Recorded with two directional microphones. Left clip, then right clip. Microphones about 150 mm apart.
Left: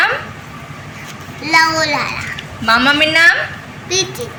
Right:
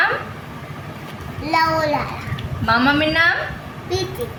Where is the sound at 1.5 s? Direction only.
20° right (ahead or behind).